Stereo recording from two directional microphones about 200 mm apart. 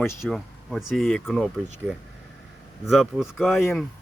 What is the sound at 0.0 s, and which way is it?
Speech, 15° left (ahead or behind).